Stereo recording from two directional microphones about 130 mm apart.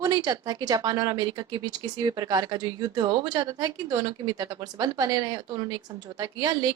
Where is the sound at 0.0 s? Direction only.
30° right (ahead or behind).